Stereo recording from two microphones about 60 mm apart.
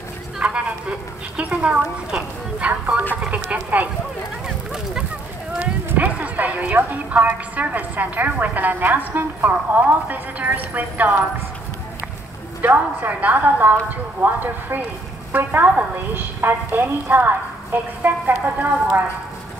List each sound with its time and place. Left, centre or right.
0.4 s speech: centre
2.7 s a woman's voice: right
5.9 s a woman's voice: right
12.6 s a woman's voice: right
16.3 s a woman's voice: right